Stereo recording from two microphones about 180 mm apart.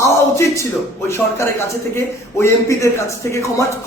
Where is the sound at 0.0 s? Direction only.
15° left (ahead or behind).